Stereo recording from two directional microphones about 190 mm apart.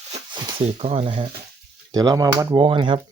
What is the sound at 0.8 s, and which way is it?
Speech, 35° right (ahead or behind).